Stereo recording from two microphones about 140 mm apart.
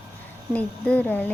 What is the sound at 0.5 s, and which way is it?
Speech, 10° left (ahead or behind).